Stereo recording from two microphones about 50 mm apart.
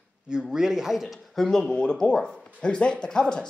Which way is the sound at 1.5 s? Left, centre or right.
Centre.